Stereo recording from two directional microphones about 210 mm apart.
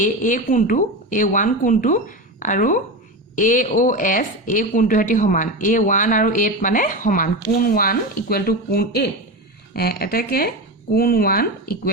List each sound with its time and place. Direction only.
0.0 s a woman's voice: 35° left (ahead or behind)